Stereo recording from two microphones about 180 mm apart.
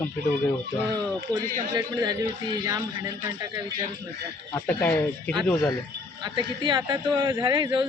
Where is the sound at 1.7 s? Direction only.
25° right (ahead or behind).